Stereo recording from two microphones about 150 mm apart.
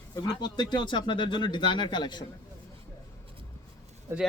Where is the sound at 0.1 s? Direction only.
25° left (ahead or behind).